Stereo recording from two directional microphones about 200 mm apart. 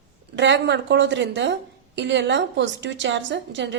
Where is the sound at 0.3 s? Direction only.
60° right (ahead or behind).